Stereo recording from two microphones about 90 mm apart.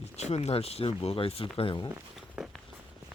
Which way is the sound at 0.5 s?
90° left.